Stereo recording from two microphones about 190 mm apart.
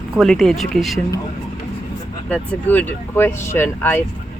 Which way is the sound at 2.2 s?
5° left (ahead or behind).